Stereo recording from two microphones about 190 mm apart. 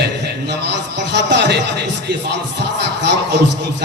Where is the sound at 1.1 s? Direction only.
60° right (ahead or behind).